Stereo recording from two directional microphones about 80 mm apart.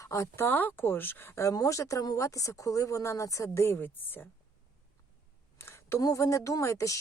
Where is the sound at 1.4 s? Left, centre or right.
Left.